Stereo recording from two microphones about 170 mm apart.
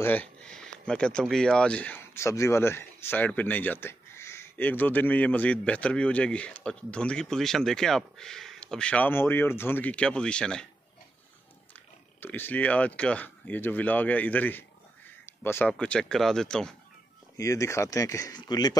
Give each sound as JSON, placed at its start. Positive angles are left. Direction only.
{"t": 0.0, "sound": "a man's voice", "side_deg": 10}
{"t": 12.2, "sound": "a man's voice", "side_deg": 10}
{"t": 15.2, "sound": "a sound", "side_deg": 15}
{"t": 15.7, "sound": "speech", "side_deg": 5}
{"t": 17.4, "sound": "speech", "side_deg": 20}